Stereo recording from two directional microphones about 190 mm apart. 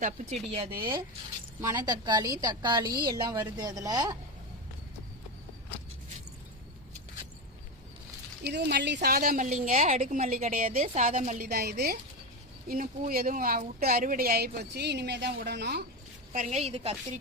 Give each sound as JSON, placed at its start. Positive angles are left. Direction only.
{"t": 0.5, "sound": "a woman's voice", "side_deg": -30}
{"t": 8.4, "sound": "a woman's voice", "side_deg": -60}
{"t": 11.5, "sound": "speech", "side_deg": -55}
{"t": 16.3, "sound": "a woman's voice", "side_deg": -40}